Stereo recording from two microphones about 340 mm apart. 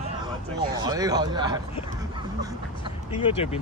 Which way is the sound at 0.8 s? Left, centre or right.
Centre.